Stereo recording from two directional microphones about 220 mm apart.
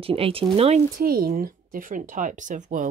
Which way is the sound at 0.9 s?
40° right (ahead or behind).